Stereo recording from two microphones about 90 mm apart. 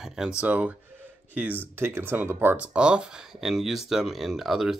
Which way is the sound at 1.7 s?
25° right (ahead or behind).